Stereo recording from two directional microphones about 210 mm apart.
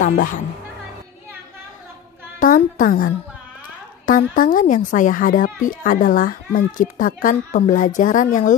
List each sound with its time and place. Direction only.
2.4 s a woman's voice: 40° left (ahead or behind)